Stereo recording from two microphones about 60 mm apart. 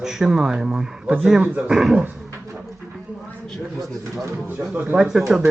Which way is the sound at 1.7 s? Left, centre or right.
Centre.